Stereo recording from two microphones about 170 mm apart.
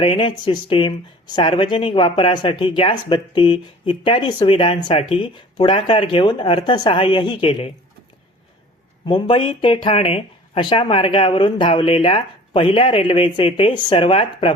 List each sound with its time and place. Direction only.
0.0 s speech: 30° left (ahead or behind)
9.0 s speech: 30° left (ahead or behind)